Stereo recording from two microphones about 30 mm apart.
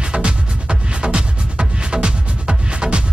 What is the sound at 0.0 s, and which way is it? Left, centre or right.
Music, right.